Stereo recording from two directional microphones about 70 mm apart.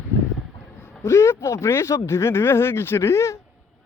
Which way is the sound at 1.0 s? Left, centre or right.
Left.